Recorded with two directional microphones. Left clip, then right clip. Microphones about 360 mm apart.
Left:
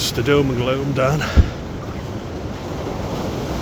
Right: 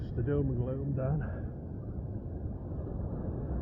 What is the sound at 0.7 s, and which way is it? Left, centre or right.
Speech, centre.